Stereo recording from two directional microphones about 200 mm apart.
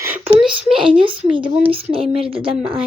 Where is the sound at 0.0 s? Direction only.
10° right (ahead or behind).